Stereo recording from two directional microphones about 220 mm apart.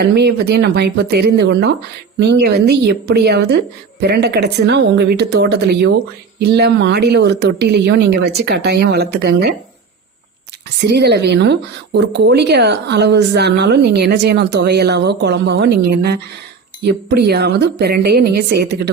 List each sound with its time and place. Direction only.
0.0 s speech: 50° right (ahead or behind)
10.8 s speech: 50° right (ahead or behind)